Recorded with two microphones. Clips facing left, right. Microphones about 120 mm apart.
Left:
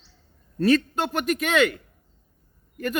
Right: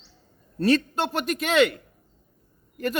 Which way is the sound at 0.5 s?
35° right (ahead or behind).